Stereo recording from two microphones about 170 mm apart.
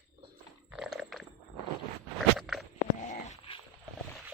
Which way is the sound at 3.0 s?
45° left (ahead or behind).